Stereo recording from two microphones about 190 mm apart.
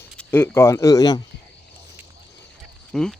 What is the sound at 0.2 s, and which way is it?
Speech, 10° left (ahead or behind).